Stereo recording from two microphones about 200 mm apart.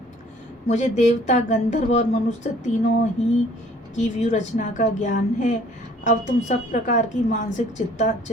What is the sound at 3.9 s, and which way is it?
A woman's voice, 35° left (ahead or behind).